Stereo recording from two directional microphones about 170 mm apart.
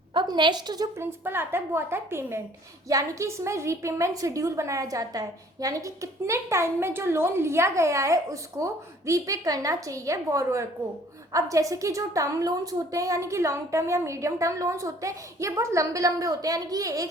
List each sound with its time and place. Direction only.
0.1 s a woman's voice: 25° right (ahead or behind)
1.2 s a woman's voice: 15° right (ahead or behind)